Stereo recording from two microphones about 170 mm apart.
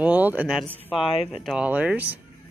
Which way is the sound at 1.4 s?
5° right (ahead or behind).